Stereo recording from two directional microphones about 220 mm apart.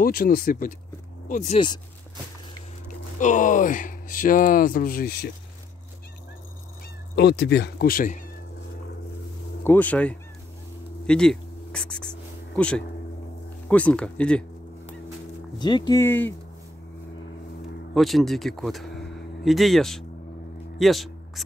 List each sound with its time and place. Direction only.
0.0 s speech: 40° left (ahead or behind)
3.2 s speech: 35° left (ahead or behind)
7.2 s speech: 50° left (ahead or behind)
9.7 s speech: 5° left (ahead or behind)
11.1 s a sound: 5° left (ahead or behind)
13.7 s speech: 5° left (ahead or behind)
15.6 s speech: 20° left (ahead or behind)
17.9 s speech: centre (ahead or behind)